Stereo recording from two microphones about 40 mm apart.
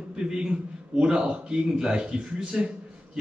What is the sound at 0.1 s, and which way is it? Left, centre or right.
A man's voice, right.